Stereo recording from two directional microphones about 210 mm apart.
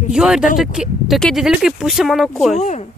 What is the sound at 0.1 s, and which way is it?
Speech, 5° right (ahead or behind).